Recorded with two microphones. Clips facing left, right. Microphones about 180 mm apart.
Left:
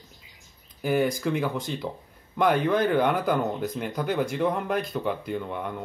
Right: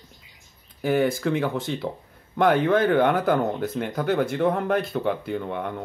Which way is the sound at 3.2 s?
Centre (ahead or behind).